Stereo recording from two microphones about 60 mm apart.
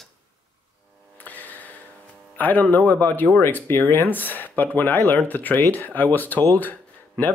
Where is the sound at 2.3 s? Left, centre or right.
Left.